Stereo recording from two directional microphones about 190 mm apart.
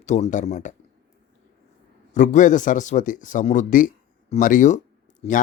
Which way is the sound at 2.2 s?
40° left (ahead or behind).